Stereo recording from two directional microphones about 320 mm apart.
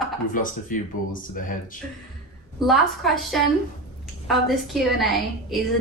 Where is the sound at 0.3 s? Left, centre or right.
Left.